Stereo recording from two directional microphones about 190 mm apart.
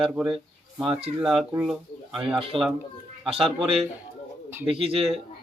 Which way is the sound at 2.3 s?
30° right (ahead or behind).